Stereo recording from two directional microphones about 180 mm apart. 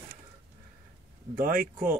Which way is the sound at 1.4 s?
50° right (ahead or behind).